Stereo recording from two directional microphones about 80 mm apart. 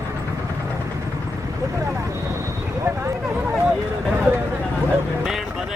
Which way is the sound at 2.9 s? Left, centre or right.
Right.